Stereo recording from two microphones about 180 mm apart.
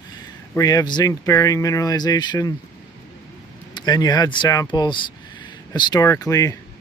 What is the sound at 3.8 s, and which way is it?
Speech, 20° left (ahead or behind).